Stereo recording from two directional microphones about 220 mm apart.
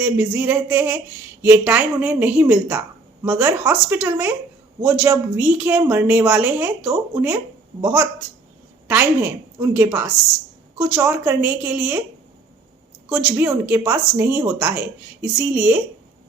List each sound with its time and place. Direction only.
0.0 s speech: 5° right (ahead or behind)
13.1 s speech: 5° right (ahead or behind)